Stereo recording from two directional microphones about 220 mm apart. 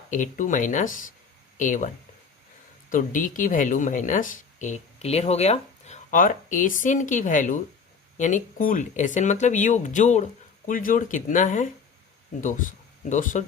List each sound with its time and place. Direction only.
0.1 s speech: 35° left (ahead or behind)
2.9 s speech: 35° left (ahead or behind)